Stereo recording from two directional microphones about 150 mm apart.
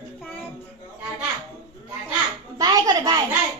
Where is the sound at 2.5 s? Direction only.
25° right (ahead or behind).